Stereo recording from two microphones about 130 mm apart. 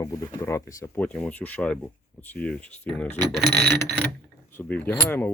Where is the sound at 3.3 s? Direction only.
Centre (ahead or behind).